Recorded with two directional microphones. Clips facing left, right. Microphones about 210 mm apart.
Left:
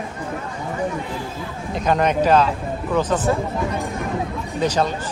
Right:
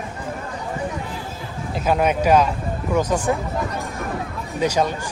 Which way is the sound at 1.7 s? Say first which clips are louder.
Left 1 dB; 5° right (ahead or behind).